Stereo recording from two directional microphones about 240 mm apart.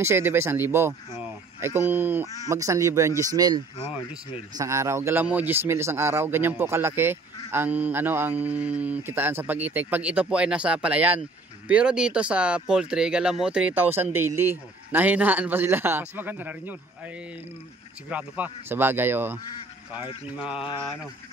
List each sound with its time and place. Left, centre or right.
0.0 s speech: centre
18.1 s speech: centre
20.6 s speech: centre